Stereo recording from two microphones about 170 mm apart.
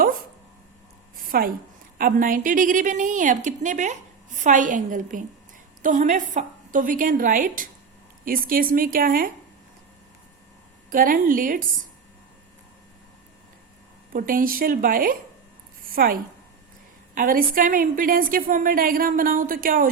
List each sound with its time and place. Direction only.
1.1 s a sound: 60° right (ahead or behind)
2.0 s a woman's voice: 55° right (ahead or behind)
10.8 s a woman's voice: 55° right (ahead or behind)
14.1 s a woman's voice: 55° right (ahead or behind)
17.2 s a woman's voice: 55° right (ahead or behind)